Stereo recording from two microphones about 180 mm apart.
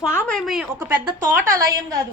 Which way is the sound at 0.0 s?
15° left (ahead or behind).